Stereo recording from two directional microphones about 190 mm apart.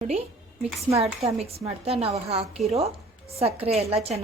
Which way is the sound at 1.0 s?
35° right (ahead or behind).